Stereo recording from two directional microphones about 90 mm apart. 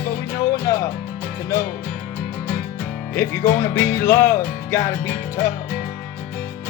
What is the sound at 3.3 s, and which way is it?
Music, 30° left (ahead or behind).